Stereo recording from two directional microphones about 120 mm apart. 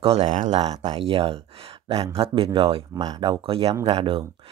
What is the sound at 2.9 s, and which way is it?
Speech, 30° right (ahead or behind).